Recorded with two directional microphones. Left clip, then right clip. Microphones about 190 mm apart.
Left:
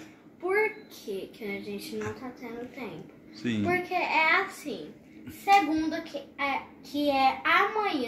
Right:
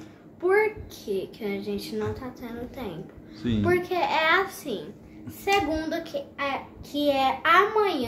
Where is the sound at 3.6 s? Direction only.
20° right (ahead or behind).